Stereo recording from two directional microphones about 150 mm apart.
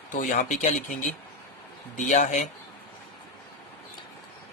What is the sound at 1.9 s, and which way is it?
Speech, 55° left (ahead or behind).